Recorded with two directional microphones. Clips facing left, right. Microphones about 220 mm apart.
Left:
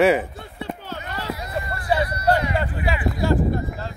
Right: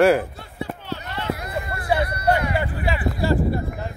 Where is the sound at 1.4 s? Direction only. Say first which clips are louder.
Even; 55° right (ahead or behind).